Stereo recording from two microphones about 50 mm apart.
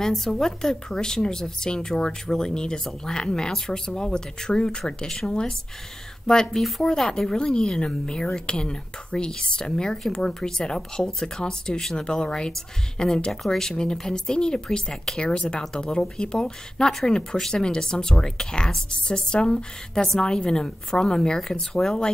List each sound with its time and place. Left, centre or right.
0.0 s speech: centre
6.2 s speech: centre